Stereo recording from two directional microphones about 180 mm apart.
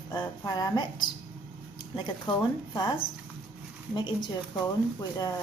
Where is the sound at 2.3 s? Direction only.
30° left (ahead or behind).